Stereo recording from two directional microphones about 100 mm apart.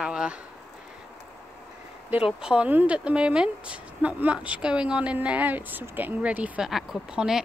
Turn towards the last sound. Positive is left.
turn(degrees=-5)  # may be behind; listen again after turning